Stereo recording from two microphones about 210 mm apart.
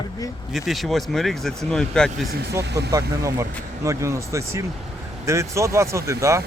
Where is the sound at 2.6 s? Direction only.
50° right (ahead or behind).